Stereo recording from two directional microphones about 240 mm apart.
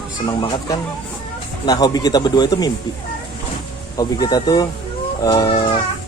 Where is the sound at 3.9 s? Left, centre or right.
Centre.